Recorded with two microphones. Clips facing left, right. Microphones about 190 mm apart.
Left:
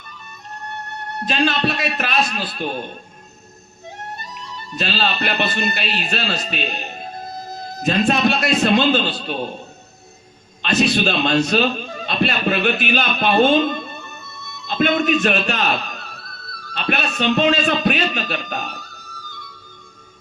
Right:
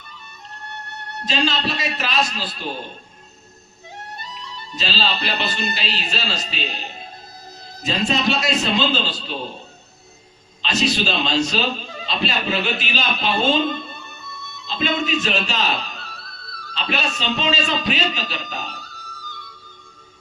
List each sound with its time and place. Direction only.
1.2 s a man's voice: 55° left (ahead or behind)
4.7 s a man's voice: 55° left (ahead or behind)
10.6 s a man's voice: 55° left (ahead or behind)